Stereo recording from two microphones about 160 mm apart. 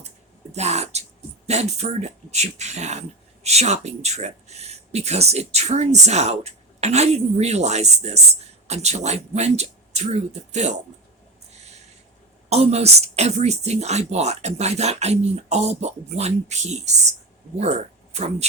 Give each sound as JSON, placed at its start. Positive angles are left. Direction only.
{"t": 0.5, "sound": "a sound", "side_deg": -45}
{"t": 1.5, "sound": "speech", "side_deg": -40}
{"t": 12.5, "sound": "speech", "side_deg": -40}